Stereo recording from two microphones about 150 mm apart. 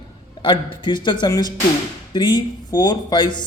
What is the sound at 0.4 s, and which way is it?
Speech, 30° left (ahead or behind).